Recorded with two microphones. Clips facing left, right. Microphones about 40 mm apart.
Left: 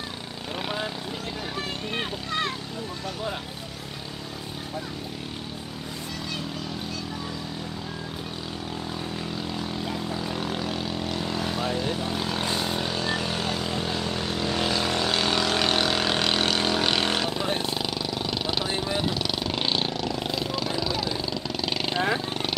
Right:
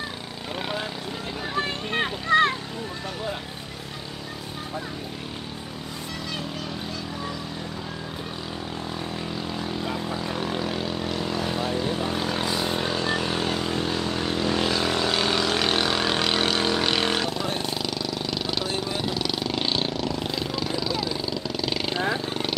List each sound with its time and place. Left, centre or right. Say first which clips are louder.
1.6 s a sound: right 6 dB; right
9.5 s vehicle: right 2 dB; centre
17.4 s vehicle: left 1 dB; centre